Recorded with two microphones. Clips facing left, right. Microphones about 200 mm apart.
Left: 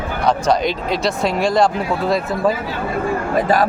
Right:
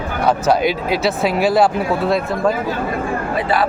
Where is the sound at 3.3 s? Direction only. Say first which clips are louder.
Left 3 dB; 45° left (ahead or behind).